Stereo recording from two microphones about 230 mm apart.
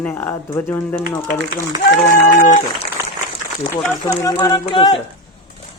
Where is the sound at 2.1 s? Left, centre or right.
Left.